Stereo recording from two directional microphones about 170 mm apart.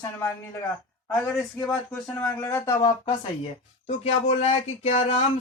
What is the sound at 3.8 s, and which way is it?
Speech, 40° left (ahead or behind).